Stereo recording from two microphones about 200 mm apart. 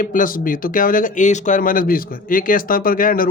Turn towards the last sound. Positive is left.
turn(degrees=45)  # may be behind; listen again after turning